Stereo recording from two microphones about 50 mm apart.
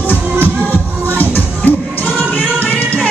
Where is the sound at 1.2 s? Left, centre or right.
Left.